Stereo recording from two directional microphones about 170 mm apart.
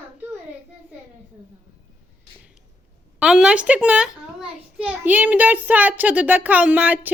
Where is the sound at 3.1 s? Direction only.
5° right (ahead or behind).